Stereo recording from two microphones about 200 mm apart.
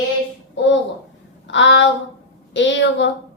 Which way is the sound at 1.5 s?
65° left (ahead or behind).